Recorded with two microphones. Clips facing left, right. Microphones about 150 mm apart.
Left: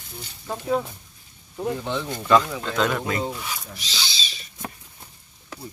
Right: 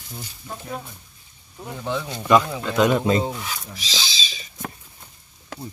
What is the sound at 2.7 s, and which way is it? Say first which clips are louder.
Speech: right 7 dB; 15° right (ahead or behind).